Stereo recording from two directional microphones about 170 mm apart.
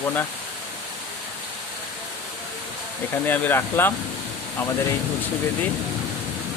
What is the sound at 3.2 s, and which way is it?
Speech, 10° left (ahead or behind).